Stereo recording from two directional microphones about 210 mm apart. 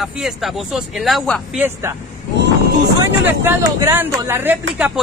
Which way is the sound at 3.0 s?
10° right (ahead or behind).